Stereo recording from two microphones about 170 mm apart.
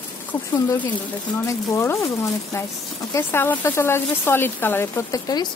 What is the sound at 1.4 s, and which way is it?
Speech, 20° left (ahead or behind).